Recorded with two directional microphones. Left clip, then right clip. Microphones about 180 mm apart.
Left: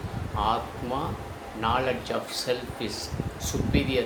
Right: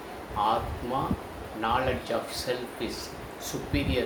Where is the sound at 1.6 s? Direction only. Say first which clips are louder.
Left 1 dB; 15° left (ahead or behind).